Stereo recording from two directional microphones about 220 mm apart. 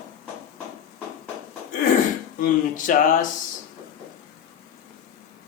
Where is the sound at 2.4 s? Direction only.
35° left (ahead or behind).